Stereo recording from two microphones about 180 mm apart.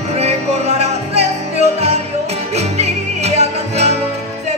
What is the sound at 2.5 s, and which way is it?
Music, 35° right (ahead or behind).